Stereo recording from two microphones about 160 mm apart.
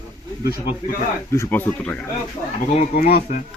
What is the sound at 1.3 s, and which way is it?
Speech, 15° left (ahead or behind).